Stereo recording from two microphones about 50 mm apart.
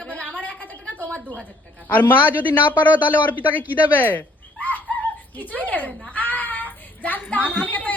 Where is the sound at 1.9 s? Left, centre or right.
Left.